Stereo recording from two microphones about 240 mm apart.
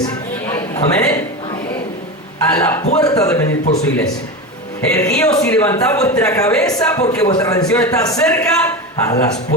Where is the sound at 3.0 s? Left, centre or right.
Centre.